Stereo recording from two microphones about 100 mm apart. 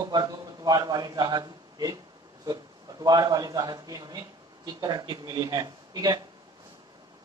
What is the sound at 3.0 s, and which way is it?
A man's voice, 40° right (ahead or behind).